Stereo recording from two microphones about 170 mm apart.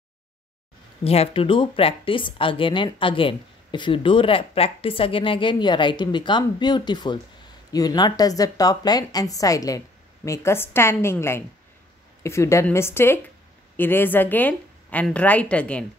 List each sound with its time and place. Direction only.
1.0 s a woman's voice: 35° left (ahead or behind); by 15.8 s 5° left (ahead or behind)